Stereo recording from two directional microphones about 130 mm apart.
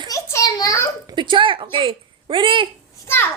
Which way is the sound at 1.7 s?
40° right (ahead or behind).